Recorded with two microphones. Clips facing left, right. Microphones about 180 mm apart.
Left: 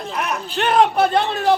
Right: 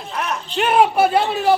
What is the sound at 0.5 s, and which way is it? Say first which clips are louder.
A man's voice: right 1 dB; 5° right (ahead or behind).